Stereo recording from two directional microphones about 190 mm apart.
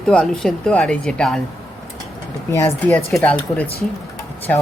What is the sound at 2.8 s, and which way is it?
Speech, 10° left (ahead or behind).